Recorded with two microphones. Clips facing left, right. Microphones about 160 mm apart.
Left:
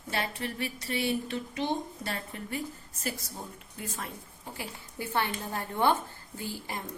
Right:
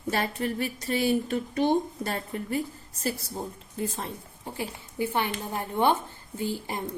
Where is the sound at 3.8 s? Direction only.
30° right (ahead or behind).